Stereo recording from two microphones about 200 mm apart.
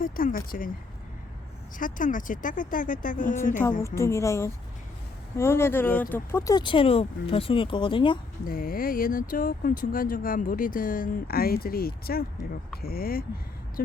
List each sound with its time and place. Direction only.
0.0 s speech: 45° left (ahead or behind)
1.8 s speech: 40° left (ahead or behind)
3.7 s a woman's voice: 15° left (ahead or behind)
8.4 s speech: 45° left (ahead or behind)